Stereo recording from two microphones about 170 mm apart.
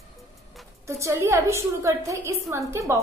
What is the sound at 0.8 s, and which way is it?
A woman's voice, 15° right (ahead or behind).